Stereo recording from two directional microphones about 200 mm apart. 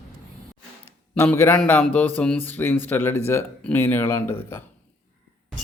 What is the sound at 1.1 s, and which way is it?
Speech, 10° left (ahead or behind).